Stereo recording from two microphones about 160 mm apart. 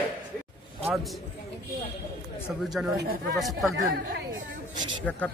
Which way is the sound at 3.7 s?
60° right (ahead or behind).